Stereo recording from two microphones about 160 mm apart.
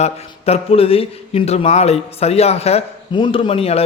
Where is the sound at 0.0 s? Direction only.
40° left (ahead or behind).